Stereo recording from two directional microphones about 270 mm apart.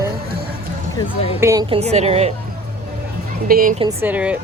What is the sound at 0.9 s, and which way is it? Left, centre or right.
Speech, left.